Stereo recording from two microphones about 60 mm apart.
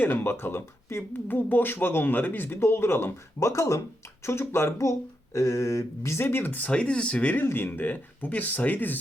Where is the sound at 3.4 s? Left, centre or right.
Left.